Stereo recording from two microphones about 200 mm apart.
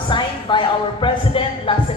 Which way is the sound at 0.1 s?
25° left (ahead or behind).